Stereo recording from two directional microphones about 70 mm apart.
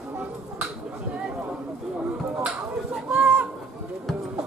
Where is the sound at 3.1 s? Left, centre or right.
Centre.